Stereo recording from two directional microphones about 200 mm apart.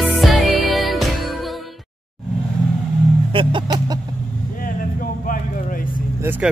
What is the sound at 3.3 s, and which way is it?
Music, 25° right (ahead or behind).